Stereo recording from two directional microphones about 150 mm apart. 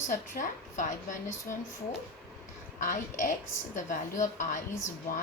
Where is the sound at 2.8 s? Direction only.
55° left (ahead or behind).